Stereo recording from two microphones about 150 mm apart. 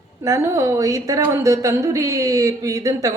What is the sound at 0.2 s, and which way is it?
A woman's voice, 20° right (ahead or behind).